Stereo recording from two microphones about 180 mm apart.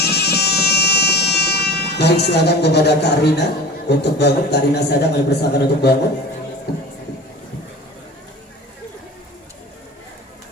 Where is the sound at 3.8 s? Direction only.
70° left (ahead or behind).